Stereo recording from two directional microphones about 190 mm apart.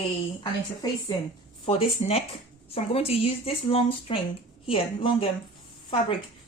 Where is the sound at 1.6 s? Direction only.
30° left (ahead or behind).